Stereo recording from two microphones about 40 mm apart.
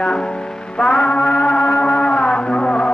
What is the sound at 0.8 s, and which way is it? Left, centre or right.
Music, left.